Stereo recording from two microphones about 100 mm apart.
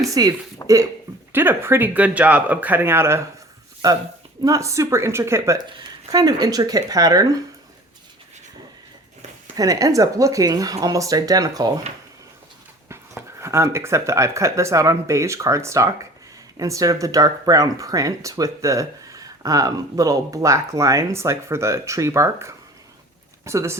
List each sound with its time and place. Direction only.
0.0 s speech: 40° right (ahead or behind)
0.6 s a sound: 40° left (ahead or behind)
1.3 s speech: 20° right (ahead or behind)
4.4 s speech: 30° right (ahead or behind)
6.1 s speech: 40° right (ahead or behind)
9.6 s speech: 35° right (ahead or behind)
13.4 s speech: 30° right (ahead or behind)